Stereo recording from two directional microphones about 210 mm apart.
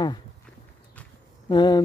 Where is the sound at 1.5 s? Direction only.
20° left (ahead or behind).